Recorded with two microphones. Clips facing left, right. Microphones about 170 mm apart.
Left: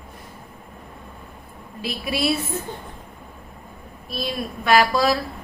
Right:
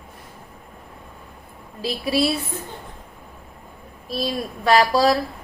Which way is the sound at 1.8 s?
30° right (ahead or behind).